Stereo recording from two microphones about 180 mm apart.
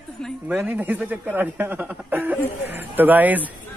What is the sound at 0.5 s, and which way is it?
Speech, 10° right (ahead or behind).